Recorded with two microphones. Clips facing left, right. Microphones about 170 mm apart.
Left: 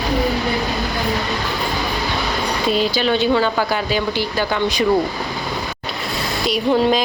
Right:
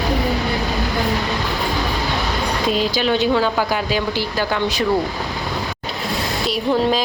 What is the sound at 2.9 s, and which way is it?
Speech, 5° right (ahead or behind).